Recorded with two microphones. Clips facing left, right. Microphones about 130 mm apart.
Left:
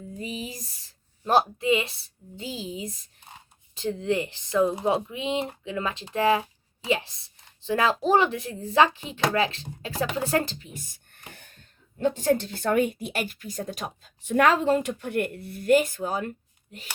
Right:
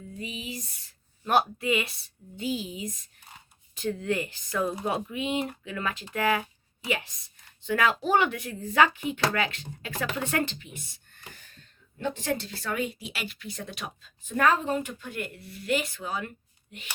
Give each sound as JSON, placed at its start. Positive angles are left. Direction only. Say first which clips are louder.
{"t": 0.2, "sound": "a sound", "louder": "left 2 dB", "side_deg": 40}
{"t": 1.2, "sound": "speech", "louder": "left 3 dB", "side_deg": 30}
{"t": 11.3, "sound": "wheeze", "louder": "left 2 dB", "side_deg": 55}
{"t": 11.9, "sound": "a woman's voice", "louder": "left 7 dB", "side_deg": 40}
{"t": 14.2, "sound": "speech", "louder": "left 3 dB", "side_deg": 75}